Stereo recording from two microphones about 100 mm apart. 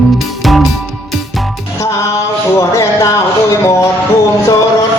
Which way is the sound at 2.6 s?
30° left (ahead or behind).